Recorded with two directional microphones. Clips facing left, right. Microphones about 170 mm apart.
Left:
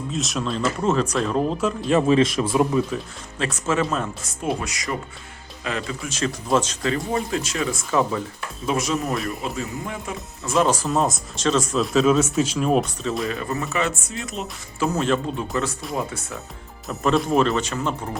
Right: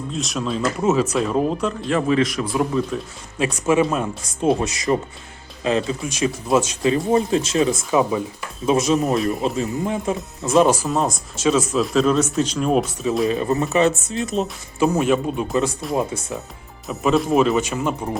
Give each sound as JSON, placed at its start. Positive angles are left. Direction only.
{"t": 0.1, "sound": "speech", "side_deg": 0}
{"t": 1.9, "sound": "a man's voice", "side_deg": 20}
{"t": 3.3, "sound": "speech", "side_deg": -15}
{"t": 4.4, "sound": "speech", "side_deg": -25}
{"t": 6.1, "sound": "speech", "side_deg": -10}
{"t": 10.8, "sound": "speech", "side_deg": 0}
{"t": 13.2, "sound": "speech", "side_deg": -20}
{"t": 16.9, "sound": "speech", "side_deg": 0}